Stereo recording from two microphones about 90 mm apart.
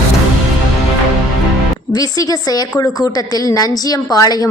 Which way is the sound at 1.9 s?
45° left (ahead or behind).